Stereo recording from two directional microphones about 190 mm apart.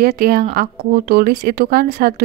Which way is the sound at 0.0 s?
50° right (ahead or behind).